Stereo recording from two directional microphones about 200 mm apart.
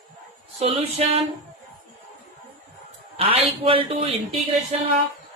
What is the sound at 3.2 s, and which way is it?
Music, 25° right (ahead or behind).